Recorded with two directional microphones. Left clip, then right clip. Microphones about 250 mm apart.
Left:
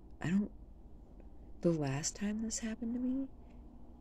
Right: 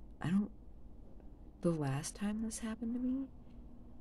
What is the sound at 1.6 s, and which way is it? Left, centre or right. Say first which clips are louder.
Speech: left 3 dB; centre.